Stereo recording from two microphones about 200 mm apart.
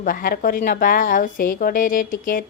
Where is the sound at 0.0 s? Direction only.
45° left (ahead or behind).